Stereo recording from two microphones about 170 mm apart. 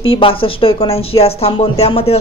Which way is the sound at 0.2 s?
30° left (ahead or behind).